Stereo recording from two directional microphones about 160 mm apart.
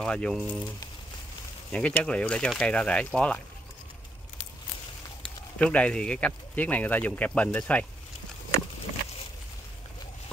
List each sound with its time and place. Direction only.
0.0 s speech: 5° left (ahead or behind)
1.7 s speech: 10° left (ahead or behind)
5.6 s speech: 10° left (ahead or behind)